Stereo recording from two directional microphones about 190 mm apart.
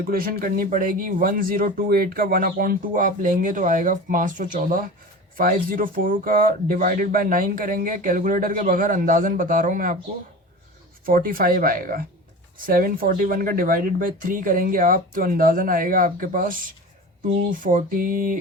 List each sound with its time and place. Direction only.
0.0 s speech: 50° right (ahead or behind)
11.0 s speech: 50° right (ahead or behind)